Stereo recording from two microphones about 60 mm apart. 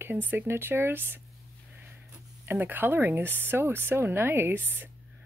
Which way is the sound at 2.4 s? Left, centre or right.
Right.